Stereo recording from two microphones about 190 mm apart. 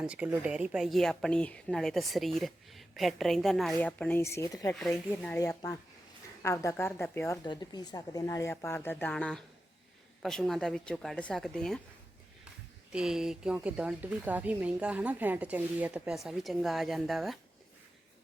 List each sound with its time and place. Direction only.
0.0 s a woman's voice: 5° right (ahead or behind); by 4.7 s 15° left (ahead or behind)
4.7 s a woman's voice: 5° left (ahead or behind)
12.9 s a woman's voice: 5° right (ahead or behind)